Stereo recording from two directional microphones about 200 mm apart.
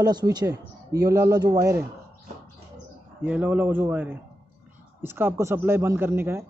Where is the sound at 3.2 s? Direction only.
10° right (ahead or behind).